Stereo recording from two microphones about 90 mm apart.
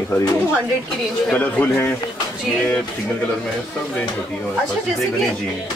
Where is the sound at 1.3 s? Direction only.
15° left (ahead or behind).